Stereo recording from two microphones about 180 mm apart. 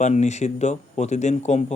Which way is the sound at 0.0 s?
40° left (ahead or behind).